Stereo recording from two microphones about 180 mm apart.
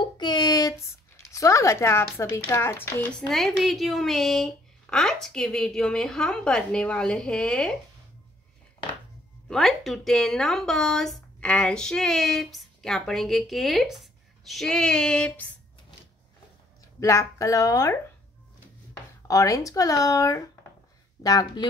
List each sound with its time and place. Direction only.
0.2 s speech: 25° left (ahead or behind); by 7.7 s 5° left (ahead or behind)
9.5 s speech: centre (ahead or behind)
17.0 s speech: 15° left (ahead or behind)
19.2 s speech: 20° left (ahead or behind)